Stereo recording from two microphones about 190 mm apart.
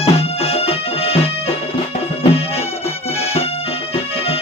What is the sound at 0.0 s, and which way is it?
Music, 30° left (ahead or behind).